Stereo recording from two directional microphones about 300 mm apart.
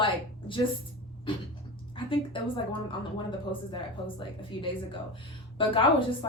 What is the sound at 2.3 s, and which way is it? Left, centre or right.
Speech, centre.